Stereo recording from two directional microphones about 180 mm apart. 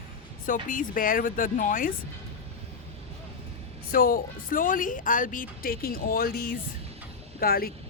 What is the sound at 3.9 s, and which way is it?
Speech, 50° left (ahead or behind).